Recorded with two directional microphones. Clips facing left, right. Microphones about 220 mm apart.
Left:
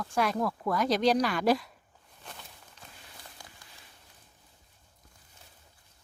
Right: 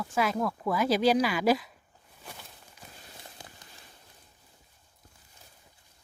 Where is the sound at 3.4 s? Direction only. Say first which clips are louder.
Right 3 dB; 20° right (ahead or behind).